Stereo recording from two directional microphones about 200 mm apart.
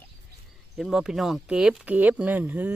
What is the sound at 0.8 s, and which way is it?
Speech, centre (ahead or behind).